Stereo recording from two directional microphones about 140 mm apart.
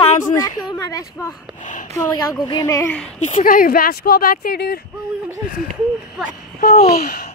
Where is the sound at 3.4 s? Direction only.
90° left.